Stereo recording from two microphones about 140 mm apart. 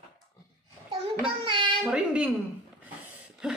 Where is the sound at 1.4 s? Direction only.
35° right (ahead or behind).